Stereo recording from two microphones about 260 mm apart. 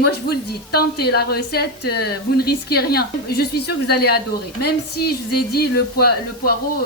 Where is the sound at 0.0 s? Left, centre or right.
Left.